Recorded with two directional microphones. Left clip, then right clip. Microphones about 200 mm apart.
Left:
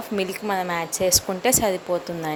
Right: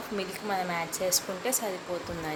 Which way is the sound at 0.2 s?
35° left (ahead or behind).